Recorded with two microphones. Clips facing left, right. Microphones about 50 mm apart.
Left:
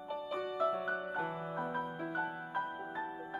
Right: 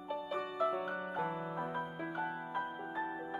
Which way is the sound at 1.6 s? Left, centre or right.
Centre.